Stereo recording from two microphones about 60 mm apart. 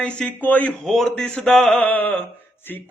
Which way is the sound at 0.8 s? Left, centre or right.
Centre.